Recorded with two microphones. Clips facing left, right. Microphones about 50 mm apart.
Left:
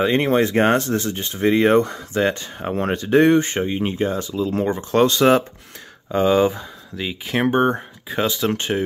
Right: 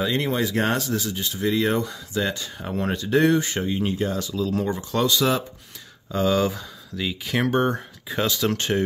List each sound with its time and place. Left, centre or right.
0.0 s speech: left
6.1 s speech: left